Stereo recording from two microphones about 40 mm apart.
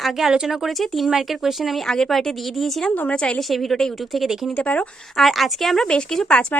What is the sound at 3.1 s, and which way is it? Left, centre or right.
Speech, left.